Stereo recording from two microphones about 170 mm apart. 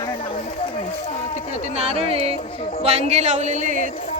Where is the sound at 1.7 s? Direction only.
35° right (ahead or behind).